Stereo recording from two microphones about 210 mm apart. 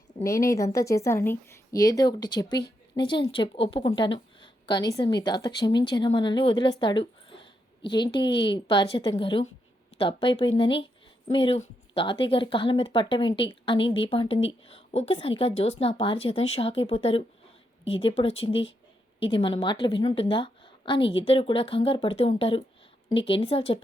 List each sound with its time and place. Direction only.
0.3 s a woman's voice: 15° left (ahead or behind)